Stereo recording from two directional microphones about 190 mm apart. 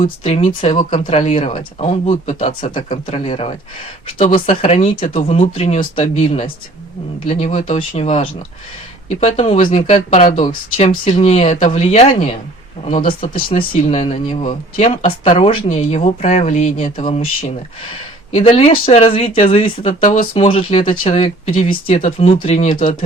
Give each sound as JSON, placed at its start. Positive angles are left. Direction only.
{"t": 0.0, "sound": "speech", "side_deg": 30}
{"t": 18.3, "sound": "speech", "side_deg": 30}